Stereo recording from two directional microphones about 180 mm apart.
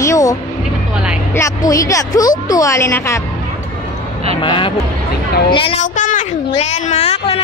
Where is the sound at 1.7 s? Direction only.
20° left (ahead or behind).